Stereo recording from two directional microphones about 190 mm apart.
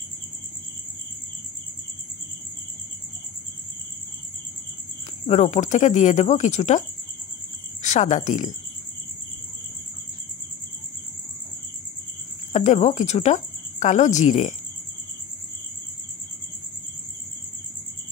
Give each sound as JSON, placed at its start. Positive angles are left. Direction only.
{"t": 5.2, "sound": "speech", "side_deg": 35}
{"t": 7.8, "sound": "speech", "side_deg": 40}
{"t": 12.5, "sound": "speech", "side_deg": 35}